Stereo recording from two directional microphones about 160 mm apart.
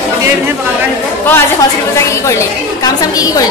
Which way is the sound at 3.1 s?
20° left (ahead or behind).